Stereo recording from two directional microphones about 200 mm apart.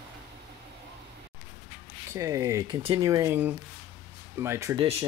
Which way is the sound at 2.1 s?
15° right (ahead or behind).